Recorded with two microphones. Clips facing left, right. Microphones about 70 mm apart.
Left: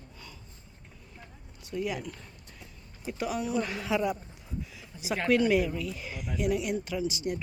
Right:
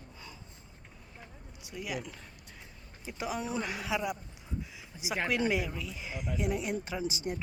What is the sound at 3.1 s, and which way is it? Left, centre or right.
Speech, centre.